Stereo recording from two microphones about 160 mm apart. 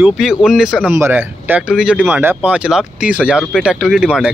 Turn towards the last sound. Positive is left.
turn(degrees=-5)  # may be behind; listen again after turning